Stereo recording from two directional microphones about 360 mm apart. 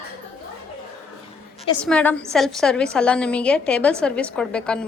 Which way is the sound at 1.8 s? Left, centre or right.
Centre.